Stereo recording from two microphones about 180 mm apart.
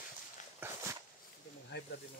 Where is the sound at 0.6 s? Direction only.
10° right (ahead or behind).